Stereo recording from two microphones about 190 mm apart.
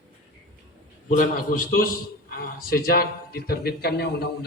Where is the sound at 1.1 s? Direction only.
45° left (ahead or behind).